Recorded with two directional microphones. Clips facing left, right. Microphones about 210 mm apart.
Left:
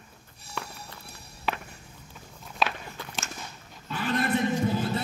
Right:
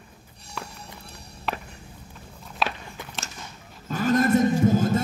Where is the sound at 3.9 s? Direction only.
45° right (ahead or behind).